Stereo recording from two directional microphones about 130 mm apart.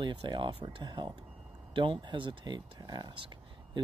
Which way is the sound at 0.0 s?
35° right (ahead or behind).